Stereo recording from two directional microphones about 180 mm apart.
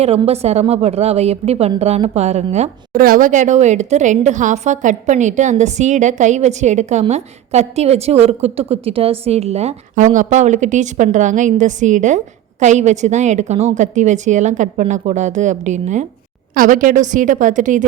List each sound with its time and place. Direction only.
0.0 s a woman's voice: 35° right (ahead or behind)
3.0 s a woman's voice: 50° right (ahead or behind)